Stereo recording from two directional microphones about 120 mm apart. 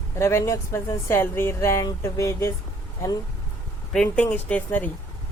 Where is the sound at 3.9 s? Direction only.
10° left (ahead or behind).